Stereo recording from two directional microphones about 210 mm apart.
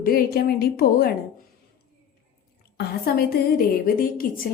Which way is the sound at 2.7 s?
50° left (ahead or behind).